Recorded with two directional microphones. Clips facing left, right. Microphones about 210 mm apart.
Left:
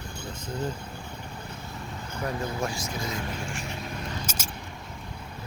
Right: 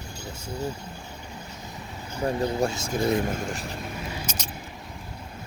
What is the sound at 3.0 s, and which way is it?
Speech, 55° right (ahead or behind).